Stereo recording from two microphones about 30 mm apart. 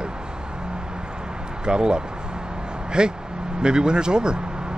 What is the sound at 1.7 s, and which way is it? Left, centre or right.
Speech, right.